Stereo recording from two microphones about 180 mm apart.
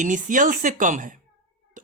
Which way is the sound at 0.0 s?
45° right (ahead or behind).